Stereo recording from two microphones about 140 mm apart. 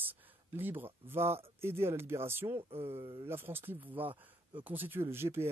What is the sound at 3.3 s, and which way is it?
Speech, 15° right (ahead or behind).